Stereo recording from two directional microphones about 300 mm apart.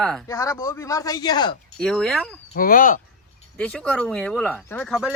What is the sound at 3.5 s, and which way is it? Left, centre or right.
Speech, centre.